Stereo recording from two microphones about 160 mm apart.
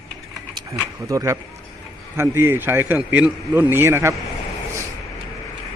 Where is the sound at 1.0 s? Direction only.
20° right (ahead or behind).